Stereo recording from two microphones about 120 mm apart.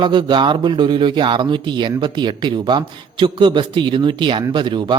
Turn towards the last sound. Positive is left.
turn(degrees=-40)  # may be behind; listen again after turning